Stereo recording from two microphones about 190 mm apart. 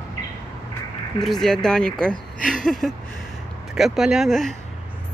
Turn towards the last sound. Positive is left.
turn(degrees=0)  # may be behind; listen again after turning